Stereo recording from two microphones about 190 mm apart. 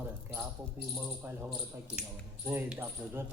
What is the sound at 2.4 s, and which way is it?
Speech, 10° right (ahead or behind).